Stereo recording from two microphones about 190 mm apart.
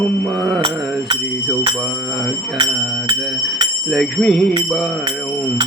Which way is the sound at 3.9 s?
5° left (ahead or behind).